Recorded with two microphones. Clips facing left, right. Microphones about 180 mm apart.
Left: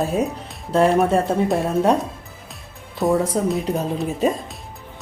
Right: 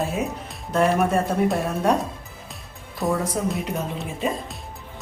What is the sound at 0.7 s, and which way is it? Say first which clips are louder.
Speech: left 4 dB; 30° left (ahead or behind).